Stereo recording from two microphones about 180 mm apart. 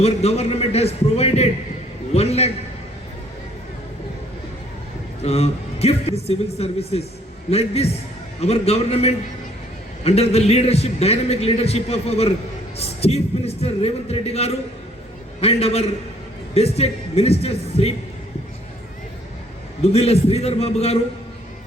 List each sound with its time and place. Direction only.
0.0 s a man's voice: 35° left (ahead or behind)
5.2 s a man's voice: 35° left (ahead or behind)
19.8 s a man's voice: 35° left (ahead or behind)